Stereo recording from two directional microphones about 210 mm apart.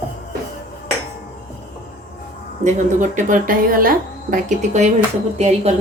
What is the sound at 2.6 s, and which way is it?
A woman's voice, 35° right (ahead or behind).